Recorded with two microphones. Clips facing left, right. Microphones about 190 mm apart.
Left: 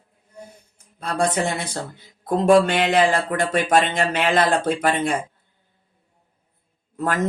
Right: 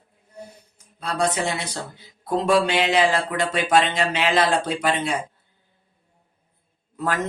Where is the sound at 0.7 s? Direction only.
50° left (ahead or behind).